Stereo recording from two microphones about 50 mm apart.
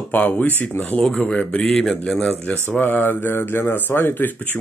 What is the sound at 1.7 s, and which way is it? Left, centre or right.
Speech, centre.